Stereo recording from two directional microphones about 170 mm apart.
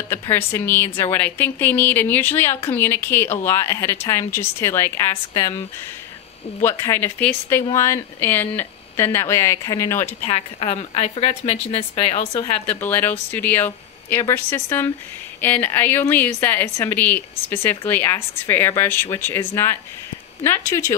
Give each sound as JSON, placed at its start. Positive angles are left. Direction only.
{"t": 0.1, "sound": "a woman's voice", "side_deg": 15}
{"t": 6.6, "sound": "a woman's voice", "side_deg": 15}
{"t": 10.0, "sound": "speech", "side_deg": 35}
{"t": 12.6, "sound": "a woman's voice", "side_deg": 10}